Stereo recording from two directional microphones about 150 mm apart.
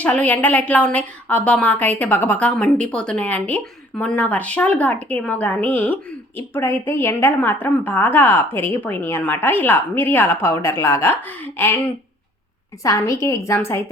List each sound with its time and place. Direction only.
0.0 s a woman's voice: 10° left (ahead or behind)
12.8 s a woman's voice: 20° left (ahead or behind)